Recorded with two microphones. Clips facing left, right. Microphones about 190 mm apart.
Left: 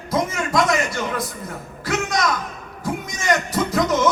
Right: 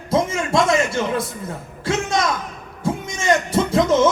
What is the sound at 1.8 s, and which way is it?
Music, 25° right (ahead or behind).